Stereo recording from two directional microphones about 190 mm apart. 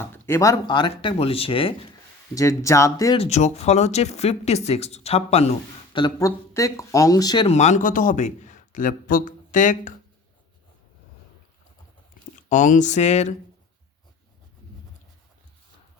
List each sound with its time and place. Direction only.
0.0 s speech: 10° left (ahead or behind); by 1.7 s 30° left (ahead or behind)
2.3 s speech: 15° left (ahead or behind)
3.2 s speech: 35° left (ahead or behind); by 7.4 s 20° left (ahead or behind)
7.4 s a man's voice: 35° left (ahead or behind)
12.5 s speech: 40° left (ahead or behind)